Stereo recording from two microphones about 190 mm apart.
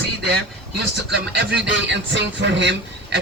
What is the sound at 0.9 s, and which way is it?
A man's voice, 65° right (ahead or behind).